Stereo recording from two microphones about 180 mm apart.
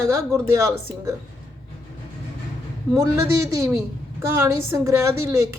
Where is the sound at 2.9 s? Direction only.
15° right (ahead or behind).